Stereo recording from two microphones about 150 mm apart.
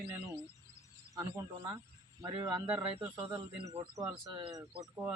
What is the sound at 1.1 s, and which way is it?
Speech, 25° right (ahead or behind).